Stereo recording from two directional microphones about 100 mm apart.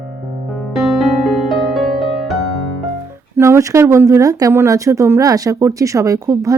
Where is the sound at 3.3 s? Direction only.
25° right (ahead or behind).